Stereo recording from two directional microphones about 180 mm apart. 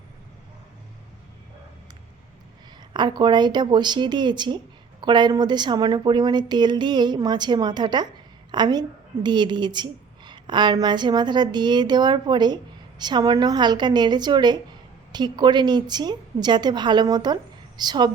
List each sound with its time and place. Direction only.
2.9 s speech: 25° right (ahead or behind)